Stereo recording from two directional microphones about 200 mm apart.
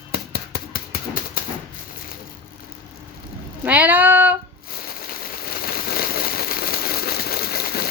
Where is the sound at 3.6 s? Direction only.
10° right (ahead or behind).